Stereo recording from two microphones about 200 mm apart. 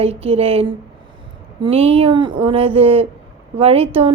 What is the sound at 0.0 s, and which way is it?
A woman's voice, 30° right (ahead or behind).